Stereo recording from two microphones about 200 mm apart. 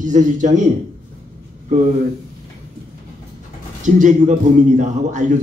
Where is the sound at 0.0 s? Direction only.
40° right (ahead or behind).